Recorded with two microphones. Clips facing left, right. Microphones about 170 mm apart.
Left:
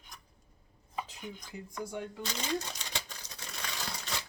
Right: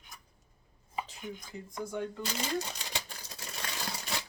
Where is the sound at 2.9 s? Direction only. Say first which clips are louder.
Right 1 dB; 10° right (ahead or behind).